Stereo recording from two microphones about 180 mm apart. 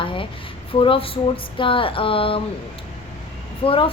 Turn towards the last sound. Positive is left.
turn(degrees=30)  # may be behind; listen again after turning